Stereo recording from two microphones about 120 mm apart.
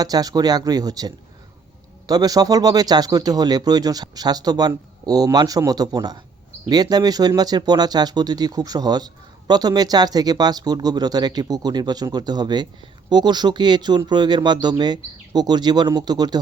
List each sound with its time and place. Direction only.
0.0 s a man's voice: 30° right (ahead or behind)